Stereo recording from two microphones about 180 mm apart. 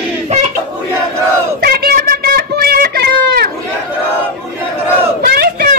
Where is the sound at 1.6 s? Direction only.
60° right (ahead or behind).